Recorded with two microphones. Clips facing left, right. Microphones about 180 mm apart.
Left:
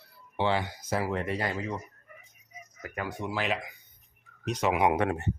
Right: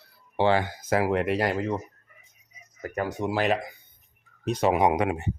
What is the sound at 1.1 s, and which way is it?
Speech, 90° right.